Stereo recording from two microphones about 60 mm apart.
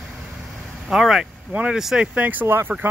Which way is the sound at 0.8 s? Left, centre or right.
Centre.